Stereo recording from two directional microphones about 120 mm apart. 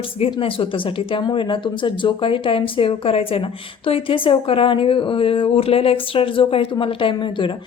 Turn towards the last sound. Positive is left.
turn(degrees=45)  # may be behind; listen again after turning